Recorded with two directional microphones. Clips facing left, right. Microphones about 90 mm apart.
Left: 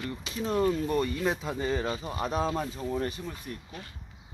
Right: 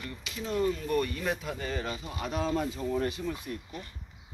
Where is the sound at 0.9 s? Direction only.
20° left (ahead or behind).